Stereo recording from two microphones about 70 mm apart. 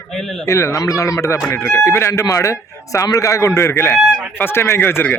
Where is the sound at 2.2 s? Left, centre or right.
Left.